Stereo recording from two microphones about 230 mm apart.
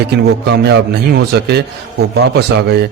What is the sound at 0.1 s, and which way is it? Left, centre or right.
A man's voice, right.